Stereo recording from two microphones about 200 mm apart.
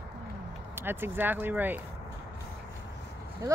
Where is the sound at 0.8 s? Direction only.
10° right (ahead or behind).